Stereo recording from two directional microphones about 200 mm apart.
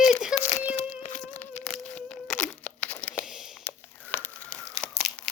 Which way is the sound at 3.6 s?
10° left (ahead or behind).